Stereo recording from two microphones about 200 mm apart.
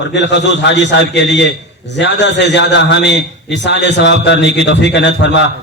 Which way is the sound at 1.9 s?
60° left (ahead or behind).